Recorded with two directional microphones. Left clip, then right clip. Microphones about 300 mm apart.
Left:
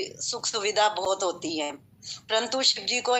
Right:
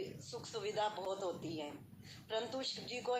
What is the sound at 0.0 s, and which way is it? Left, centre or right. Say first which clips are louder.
A woman's voice: left 15 dB; left.